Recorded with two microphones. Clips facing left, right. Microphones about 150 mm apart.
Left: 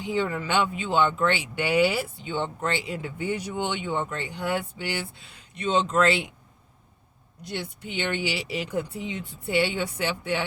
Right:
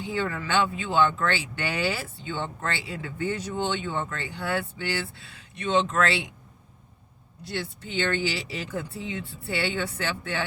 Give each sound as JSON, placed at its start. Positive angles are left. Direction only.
{"t": 0.0, "sound": "speech", "side_deg": 15}
{"t": 7.4, "sound": "speech", "side_deg": 15}